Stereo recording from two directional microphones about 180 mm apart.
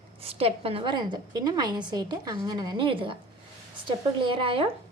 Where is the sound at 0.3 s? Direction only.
35° right (ahead or behind).